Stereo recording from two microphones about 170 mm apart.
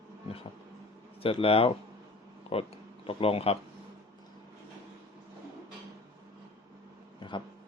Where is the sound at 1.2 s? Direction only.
35° left (ahead or behind).